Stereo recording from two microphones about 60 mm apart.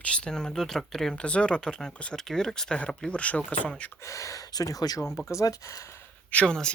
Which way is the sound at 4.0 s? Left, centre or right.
Left.